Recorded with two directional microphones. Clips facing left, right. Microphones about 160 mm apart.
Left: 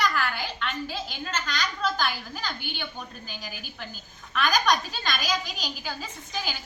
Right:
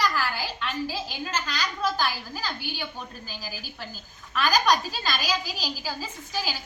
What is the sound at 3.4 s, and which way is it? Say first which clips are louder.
A woman's voice: right 2 dB; 35° right (ahead or behind).